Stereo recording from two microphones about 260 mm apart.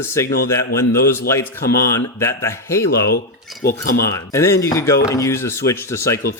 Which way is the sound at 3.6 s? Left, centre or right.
Left.